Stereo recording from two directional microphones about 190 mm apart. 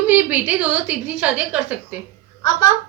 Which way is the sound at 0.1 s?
10° right (ahead or behind).